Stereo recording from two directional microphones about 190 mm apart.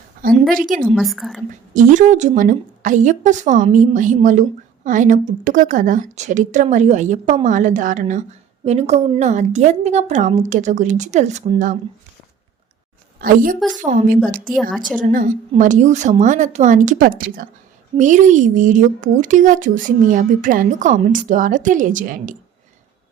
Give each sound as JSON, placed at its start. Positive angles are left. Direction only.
{"t": 0.5, "sound": "speech", "side_deg": -45}
{"t": 0.9, "sound": "a woman's voice", "side_deg": 0}
{"t": 1.7, "sound": "a woman's voice", "side_deg": -40}
{"t": 13.1, "sound": "a woman's voice", "side_deg": -45}